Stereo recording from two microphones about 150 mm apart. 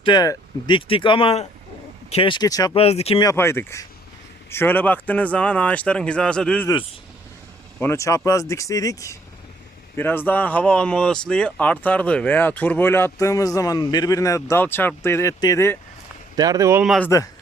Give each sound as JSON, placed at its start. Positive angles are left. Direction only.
{"t": 0.0, "sound": "speech", "side_deg": 30}
{"t": 2.7, "sound": "speech", "side_deg": 45}
{"t": 3.3, "sound": "speech", "side_deg": 15}
{"t": 7.8, "sound": "speech", "side_deg": 20}
{"t": 16.3, "sound": "speech", "side_deg": -25}
{"t": 17.1, "sound": "speech", "side_deg": 20}